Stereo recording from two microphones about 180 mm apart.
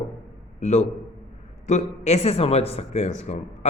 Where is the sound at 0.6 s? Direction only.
40° left (ahead or behind).